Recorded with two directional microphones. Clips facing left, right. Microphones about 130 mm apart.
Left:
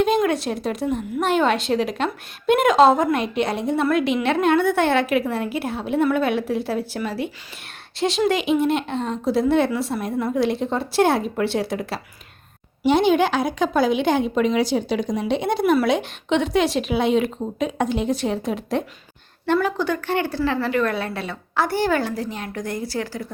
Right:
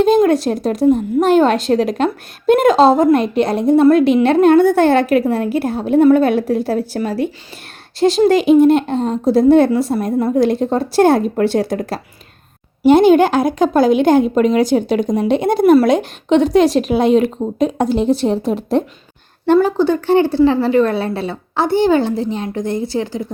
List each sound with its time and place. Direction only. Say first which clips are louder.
0.0 s a woman's voice: right 7 dB; 35° right (ahead or behind)